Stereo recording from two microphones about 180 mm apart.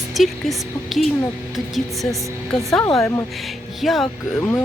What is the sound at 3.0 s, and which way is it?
Speech, 15° left (ahead or behind).